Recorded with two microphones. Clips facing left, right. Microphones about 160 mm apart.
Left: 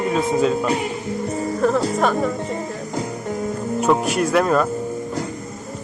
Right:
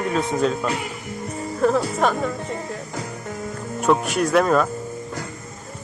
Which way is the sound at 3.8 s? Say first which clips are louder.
Even; centre (ahead or behind).